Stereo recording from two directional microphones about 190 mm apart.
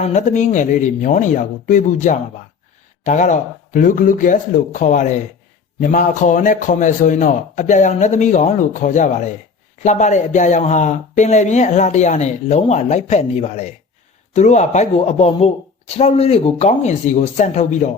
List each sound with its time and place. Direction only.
0.0 s speech: 40° left (ahead or behind)